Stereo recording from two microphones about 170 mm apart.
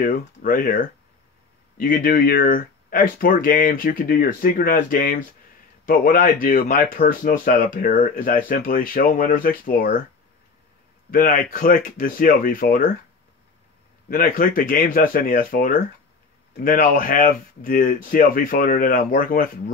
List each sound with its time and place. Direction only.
0.0 s speech: 55° left (ahead or behind)
11.1 s speech: 55° left (ahead or behind)
14.0 s speech: 55° left (ahead or behind)